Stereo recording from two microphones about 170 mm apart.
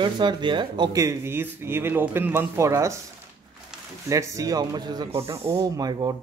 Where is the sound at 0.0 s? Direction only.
25° right (ahead or behind).